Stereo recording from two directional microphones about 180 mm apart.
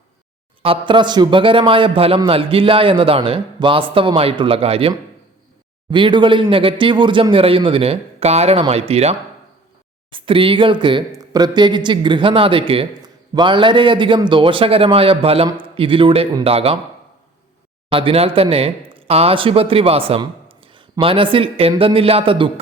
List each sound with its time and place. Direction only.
0.6 s a man's voice: 30° right (ahead or behind)
17.8 s a man's voice: 30° right (ahead or behind)